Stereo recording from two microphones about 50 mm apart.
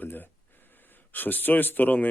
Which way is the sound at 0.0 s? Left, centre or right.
Left.